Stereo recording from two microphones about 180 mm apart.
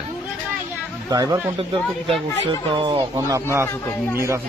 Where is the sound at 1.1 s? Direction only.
20° right (ahead or behind).